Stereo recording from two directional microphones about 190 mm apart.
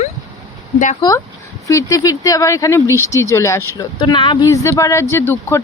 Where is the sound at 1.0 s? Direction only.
25° left (ahead or behind).